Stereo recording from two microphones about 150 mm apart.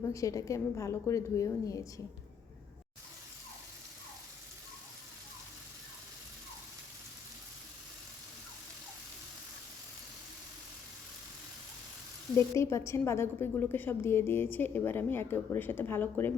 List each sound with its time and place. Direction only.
0.1 s a woman's voice: 20° left (ahead or behind)
12.5 s a woman's voice: 20° left (ahead or behind)